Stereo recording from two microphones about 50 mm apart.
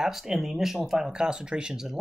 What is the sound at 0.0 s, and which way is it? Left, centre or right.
Speech, centre.